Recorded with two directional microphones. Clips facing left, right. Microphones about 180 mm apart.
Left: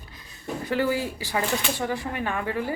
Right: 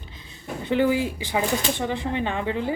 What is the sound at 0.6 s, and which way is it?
Speech, 20° right (ahead or behind).